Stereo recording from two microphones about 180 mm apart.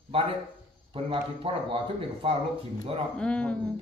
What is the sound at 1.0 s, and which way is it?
Speech, 30° right (ahead or behind).